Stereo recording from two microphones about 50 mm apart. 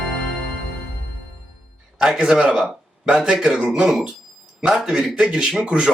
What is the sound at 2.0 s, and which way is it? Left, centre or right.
A man's voice, centre.